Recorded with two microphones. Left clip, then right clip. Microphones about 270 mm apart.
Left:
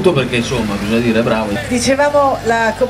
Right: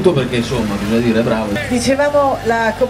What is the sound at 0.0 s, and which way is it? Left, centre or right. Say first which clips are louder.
A man's voice: left 1 dB; centre.